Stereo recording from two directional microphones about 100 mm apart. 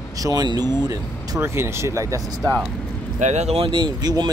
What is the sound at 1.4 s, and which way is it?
Speech, 25° right (ahead or behind).